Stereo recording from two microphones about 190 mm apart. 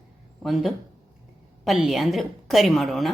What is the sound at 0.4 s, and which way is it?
A woman's voice, centre (ahead or behind).